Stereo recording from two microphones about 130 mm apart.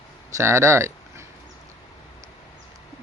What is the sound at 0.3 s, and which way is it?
Speech, 20° right (ahead or behind).